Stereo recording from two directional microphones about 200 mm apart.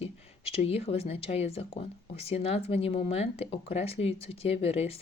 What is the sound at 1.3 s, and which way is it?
Speech, 30° left (ahead or behind).